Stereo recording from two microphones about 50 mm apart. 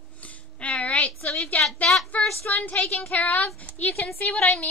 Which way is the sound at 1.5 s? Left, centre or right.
Left.